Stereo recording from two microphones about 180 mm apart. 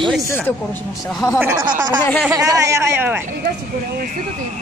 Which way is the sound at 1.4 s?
10° right (ahead or behind).